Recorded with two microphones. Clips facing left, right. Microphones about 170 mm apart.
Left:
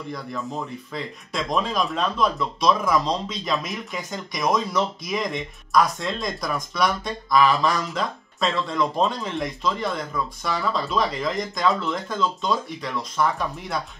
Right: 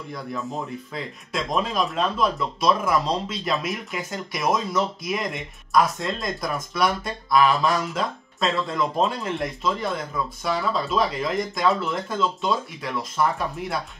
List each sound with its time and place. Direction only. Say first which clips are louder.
0.9 s speech: left 1 dB; centre (ahead or behind)